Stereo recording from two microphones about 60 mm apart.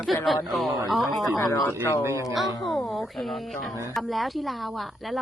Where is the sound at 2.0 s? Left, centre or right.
Right.